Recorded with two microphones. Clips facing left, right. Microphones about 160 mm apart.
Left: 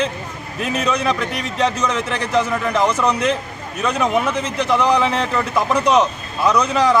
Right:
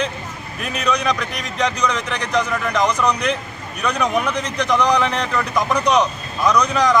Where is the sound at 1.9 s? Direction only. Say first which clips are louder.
Left 2 dB; 10° left (ahead or behind).